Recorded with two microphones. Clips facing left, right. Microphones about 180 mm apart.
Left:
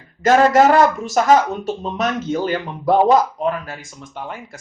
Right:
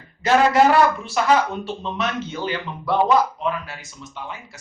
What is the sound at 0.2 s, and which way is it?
Speech, 45° left (ahead or behind).